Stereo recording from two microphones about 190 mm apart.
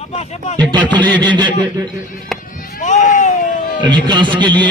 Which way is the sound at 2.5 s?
45° left (ahead or behind).